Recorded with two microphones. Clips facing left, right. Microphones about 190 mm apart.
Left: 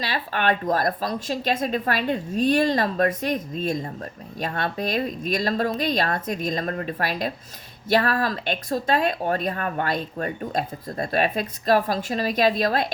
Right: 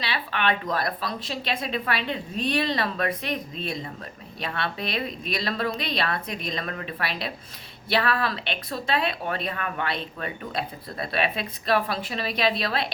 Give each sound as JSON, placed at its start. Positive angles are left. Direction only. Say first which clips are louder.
{"t": 0.0, "sound": "speech", "louder": "left 3 dB", "side_deg": 45}